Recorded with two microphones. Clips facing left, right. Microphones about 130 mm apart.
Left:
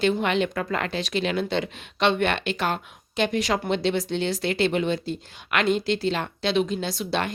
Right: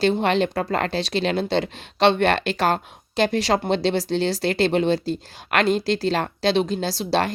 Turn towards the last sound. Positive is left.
turn(degrees=-35)  # may be behind; listen again after turning